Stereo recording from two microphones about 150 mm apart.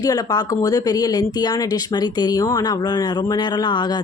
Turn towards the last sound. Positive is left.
turn(degrees=30)  # may be behind; listen again after turning